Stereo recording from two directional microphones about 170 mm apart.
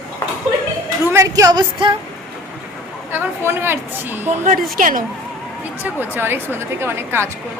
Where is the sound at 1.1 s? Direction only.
15° right (ahead or behind).